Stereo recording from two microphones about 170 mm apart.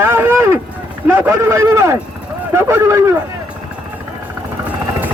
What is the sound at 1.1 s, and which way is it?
A man's voice, 15° right (ahead or behind).